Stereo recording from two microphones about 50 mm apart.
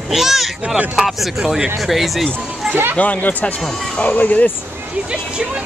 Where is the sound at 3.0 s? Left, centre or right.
Left.